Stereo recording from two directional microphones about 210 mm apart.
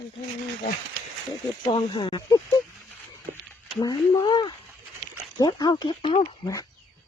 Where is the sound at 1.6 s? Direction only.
25° left (ahead or behind).